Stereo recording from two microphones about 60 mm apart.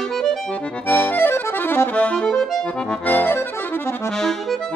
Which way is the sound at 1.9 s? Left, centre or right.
Centre.